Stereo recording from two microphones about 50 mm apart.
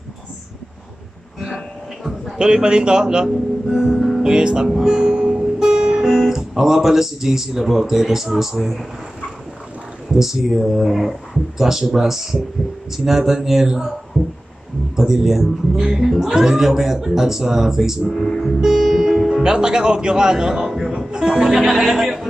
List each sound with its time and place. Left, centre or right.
2.3 s speech: centre
3.7 s music: centre
4.0 s music: centre
4.3 s speech: centre
4.6 s guitar: centre
10.1 s speech: centre
15.0 s speech: centre
18.1 s music: centre
19.4 s speech: centre